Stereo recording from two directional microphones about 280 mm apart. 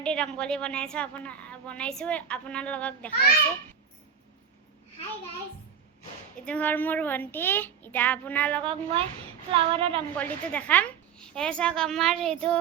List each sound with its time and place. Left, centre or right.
0.0 s a woman's voice: centre
6.4 s a woman's voice: centre
8.7 s a woman's voice: centre
10.2 s a woman's voice: centre